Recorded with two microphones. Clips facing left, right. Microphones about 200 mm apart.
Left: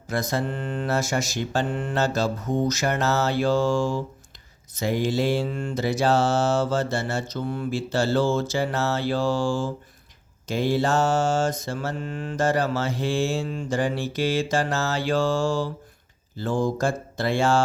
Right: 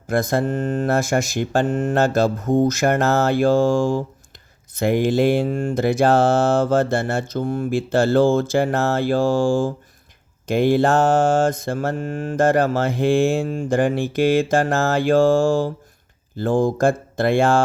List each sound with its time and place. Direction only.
0.1 s mantra: 50° right (ahead or behind)